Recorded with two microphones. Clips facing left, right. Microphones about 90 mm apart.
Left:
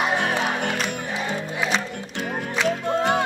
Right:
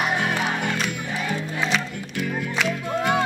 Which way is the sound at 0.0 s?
25° left (ahead or behind).